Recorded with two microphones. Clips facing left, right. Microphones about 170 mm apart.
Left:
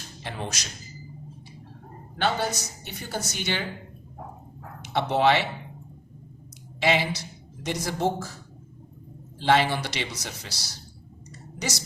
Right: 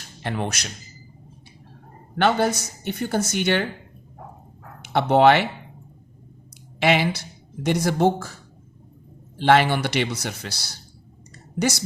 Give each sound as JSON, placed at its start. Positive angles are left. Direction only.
{"t": 0.2, "sound": "speech", "side_deg": -60}
{"t": 2.1, "sound": "speech", "side_deg": -60}
{"t": 4.8, "sound": "speech", "side_deg": -60}
{"t": 6.7, "sound": "speech", "side_deg": -65}
{"t": 9.4, "sound": "speech", "side_deg": -60}